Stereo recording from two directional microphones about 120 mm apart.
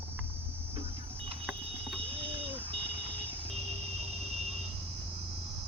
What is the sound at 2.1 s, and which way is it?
Vehicle, 50° right (ahead or behind).